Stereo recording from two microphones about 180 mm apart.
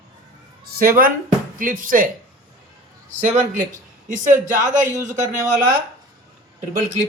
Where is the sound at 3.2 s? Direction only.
45° right (ahead or behind).